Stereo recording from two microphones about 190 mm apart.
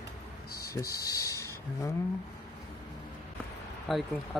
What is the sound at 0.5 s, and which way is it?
Speech, 15° left (ahead or behind).